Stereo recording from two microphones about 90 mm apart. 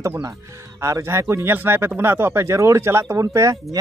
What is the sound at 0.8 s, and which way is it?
Speech, 35° right (ahead or behind).